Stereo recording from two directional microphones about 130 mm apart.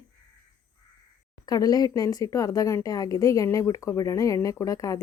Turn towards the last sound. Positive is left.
turn(degrees=25)  # may be behind; listen again after turning